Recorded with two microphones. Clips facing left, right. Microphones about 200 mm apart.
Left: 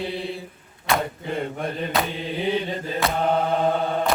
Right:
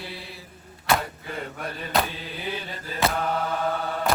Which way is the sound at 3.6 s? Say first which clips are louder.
Left 5 dB; 30° left (ahead or behind).